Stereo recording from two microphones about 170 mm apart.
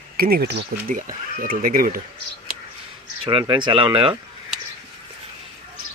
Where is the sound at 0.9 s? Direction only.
50° right (ahead or behind).